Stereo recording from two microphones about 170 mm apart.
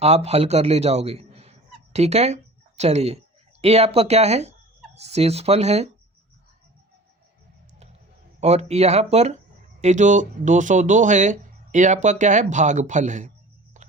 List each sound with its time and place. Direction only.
0.0 s speech: 40° right (ahead or behind)
8.4 s speech: 40° right (ahead or behind)
13.7 s a sound: 45° right (ahead or behind)